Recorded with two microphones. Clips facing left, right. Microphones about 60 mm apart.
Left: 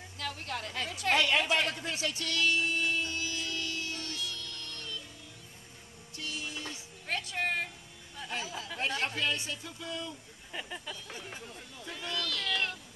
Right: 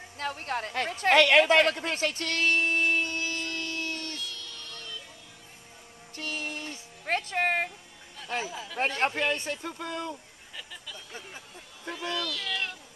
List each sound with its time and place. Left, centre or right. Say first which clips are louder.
0.2 s a woman's voice: right 6 dB; right
1.1 s speech: right 8 dB; right
4.2 s music: even; centre
6.1 s music: right 4 dB; right
8.7 s speech: right 6 dB; right
10.5 s speech: left 3 dB; left
11.9 s speech: right 4 dB; centre